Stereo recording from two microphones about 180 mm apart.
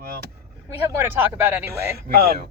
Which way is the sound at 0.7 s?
10° right (ahead or behind).